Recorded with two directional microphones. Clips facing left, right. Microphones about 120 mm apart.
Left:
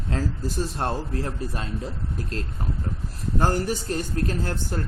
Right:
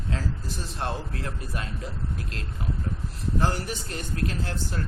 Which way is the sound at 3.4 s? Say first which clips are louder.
Left 5 dB; 45° left (ahead or behind).